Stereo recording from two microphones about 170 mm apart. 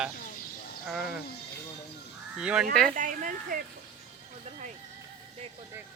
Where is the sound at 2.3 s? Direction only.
5° right (ahead or behind).